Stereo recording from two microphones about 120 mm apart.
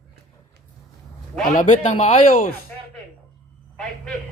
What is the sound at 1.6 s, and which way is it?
Speech, 80° left.